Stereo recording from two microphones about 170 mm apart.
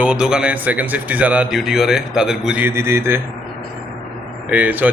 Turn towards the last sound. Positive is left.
turn(degrees=-10)  # may be behind; listen again after turning